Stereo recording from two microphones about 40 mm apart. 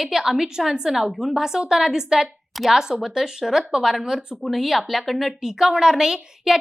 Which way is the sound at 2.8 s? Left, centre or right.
Centre.